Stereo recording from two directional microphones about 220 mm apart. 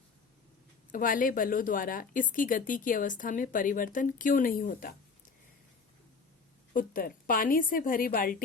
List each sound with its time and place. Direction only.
0.9 s a woman's voice: 40° left (ahead or behind)
6.7 s a woman's voice: 40° left (ahead or behind)